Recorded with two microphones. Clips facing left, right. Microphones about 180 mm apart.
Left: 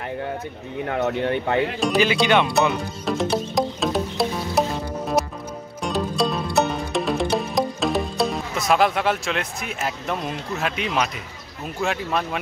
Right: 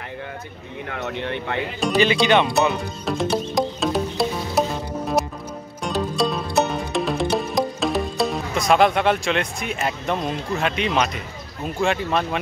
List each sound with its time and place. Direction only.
0.8 s speech: 45° left (ahead or behind)
1.8 s speech: 5° left (ahead or behind)
2.5 s music: centre (ahead or behind)
11.6 s speech: 5° left (ahead or behind)